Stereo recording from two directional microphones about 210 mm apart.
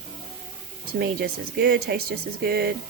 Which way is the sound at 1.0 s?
45° right (ahead or behind).